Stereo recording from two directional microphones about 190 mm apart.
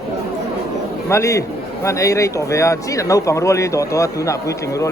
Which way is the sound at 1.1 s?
15° left (ahead or behind).